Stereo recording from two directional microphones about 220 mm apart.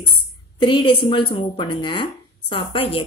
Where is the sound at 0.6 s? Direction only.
20° left (ahead or behind).